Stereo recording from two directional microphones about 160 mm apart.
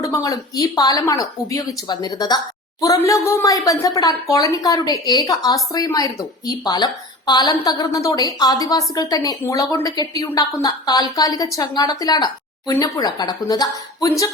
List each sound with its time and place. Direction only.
0.0 s a woman's voice: 20° left (ahead or behind)